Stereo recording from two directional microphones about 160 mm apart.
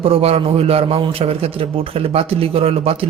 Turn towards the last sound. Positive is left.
turn(degrees=-35)  # may be behind; listen again after turning